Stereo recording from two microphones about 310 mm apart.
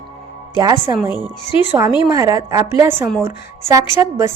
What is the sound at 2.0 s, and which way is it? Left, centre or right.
A woman's voice, centre.